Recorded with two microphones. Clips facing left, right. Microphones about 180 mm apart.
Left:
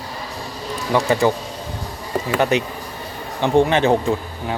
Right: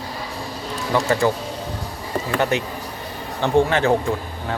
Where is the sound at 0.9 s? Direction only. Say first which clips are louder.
Left 2 dB; 15° left (ahead or behind).